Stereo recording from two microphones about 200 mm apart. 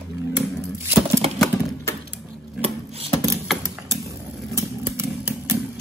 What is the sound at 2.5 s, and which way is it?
Chopping, 30° right (ahead or behind).